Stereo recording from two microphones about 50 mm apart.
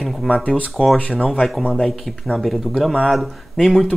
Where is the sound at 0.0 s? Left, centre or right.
Centre.